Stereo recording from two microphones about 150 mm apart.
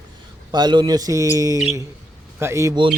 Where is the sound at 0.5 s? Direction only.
30° right (ahead or behind).